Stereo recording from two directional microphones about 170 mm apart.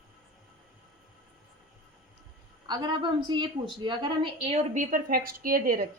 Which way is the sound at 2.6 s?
25° right (ahead or behind).